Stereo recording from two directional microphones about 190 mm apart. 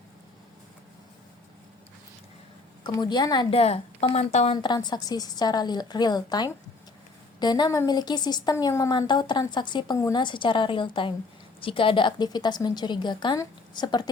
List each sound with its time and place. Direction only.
2.8 s a woman's voice: 25° left (ahead or behind)
4.5 s a woman's voice: 25° left (ahead or behind)